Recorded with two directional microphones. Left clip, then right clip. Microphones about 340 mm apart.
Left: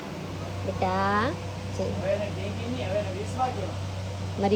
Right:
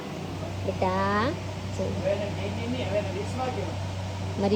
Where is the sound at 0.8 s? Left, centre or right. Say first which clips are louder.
Left 1 dB; centre.